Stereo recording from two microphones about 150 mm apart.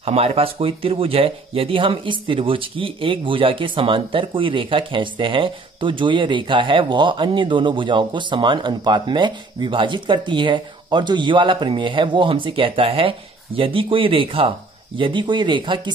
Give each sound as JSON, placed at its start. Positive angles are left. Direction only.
{"t": 0.0, "sound": "speech", "side_deg": -45}